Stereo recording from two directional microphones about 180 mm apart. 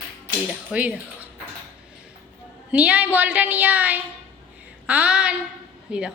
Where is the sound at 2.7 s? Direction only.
10° right (ahead or behind).